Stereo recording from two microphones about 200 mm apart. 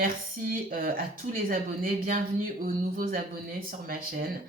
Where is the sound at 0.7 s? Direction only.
45° right (ahead or behind).